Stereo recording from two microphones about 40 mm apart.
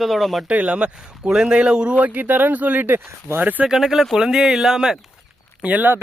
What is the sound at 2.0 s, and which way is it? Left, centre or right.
Speech, right.